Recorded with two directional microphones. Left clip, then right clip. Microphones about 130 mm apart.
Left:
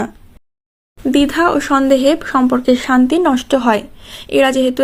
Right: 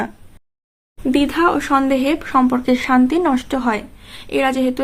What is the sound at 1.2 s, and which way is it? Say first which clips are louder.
A woman's voice: left 3 dB; 35° left (ahead or behind).